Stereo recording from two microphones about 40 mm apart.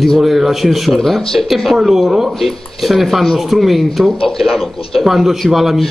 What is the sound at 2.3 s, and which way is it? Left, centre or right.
Speech, centre.